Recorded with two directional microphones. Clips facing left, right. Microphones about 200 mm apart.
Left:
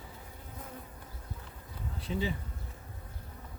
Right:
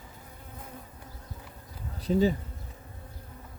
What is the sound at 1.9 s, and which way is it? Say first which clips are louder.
Bee: right 10 dB; 40° right (ahead or behind).